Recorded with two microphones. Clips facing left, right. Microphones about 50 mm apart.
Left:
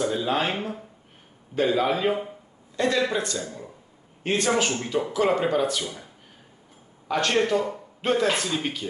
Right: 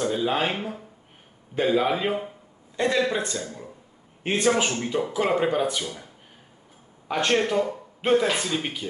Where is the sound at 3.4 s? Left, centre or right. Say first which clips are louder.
Left 1 dB; centre.